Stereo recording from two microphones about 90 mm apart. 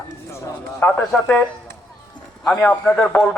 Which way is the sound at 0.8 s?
15° left (ahead or behind).